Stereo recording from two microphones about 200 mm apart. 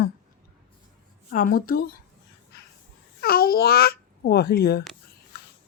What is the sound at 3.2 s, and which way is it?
A child's voice, 50° left (ahead or behind).